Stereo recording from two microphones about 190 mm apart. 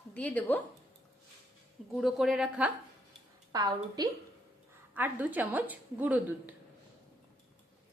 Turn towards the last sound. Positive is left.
turn(degrees=-10)  # may be behind; listen again after turning